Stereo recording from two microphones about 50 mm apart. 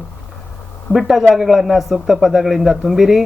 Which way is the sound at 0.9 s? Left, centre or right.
Centre.